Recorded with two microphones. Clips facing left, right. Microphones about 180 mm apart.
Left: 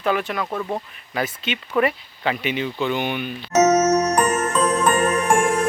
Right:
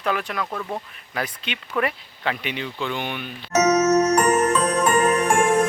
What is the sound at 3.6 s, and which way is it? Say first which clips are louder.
Music: even; 35° left (ahead or behind).